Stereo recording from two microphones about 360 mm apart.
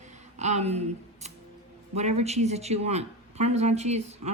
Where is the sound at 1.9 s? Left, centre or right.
Centre.